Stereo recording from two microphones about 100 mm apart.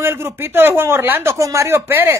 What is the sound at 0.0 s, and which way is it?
A woman's voice, 25° right (ahead or behind).